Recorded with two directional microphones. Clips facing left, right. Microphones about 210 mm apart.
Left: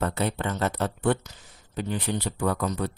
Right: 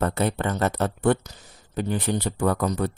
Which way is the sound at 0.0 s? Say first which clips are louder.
Right 3 dB; 50° right (ahead or behind).